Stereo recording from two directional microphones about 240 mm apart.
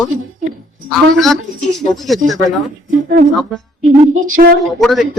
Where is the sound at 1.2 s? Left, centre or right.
Centre.